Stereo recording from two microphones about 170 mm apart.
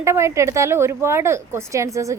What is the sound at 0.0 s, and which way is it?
Speech, 15° right (ahead or behind).